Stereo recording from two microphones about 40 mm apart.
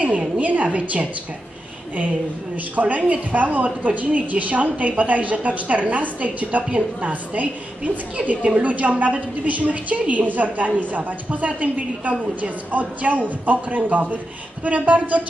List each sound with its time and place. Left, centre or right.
0.0 s speech: right
2.5 s speech: right
8.3 s a woman's voice: right
8.6 s speech: right